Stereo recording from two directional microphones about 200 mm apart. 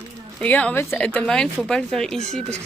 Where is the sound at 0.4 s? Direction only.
10° left (ahead or behind).